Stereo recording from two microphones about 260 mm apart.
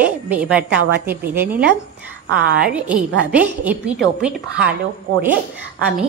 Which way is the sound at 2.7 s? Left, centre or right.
Centre.